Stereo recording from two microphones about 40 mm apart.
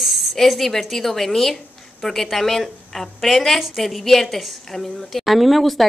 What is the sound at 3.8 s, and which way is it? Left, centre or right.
A woman's voice, centre.